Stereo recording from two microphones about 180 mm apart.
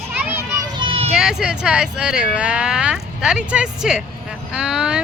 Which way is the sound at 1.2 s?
5° right (ahead or behind).